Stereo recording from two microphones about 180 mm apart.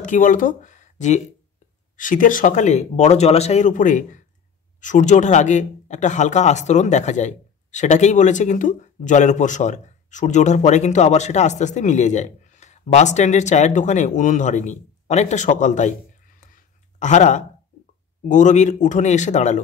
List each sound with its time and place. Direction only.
0.0 s speech: 45° left (ahead or behind)
16.3 s a sound: 40° left (ahead or behind)
18.3 s speech: 45° left (ahead or behind)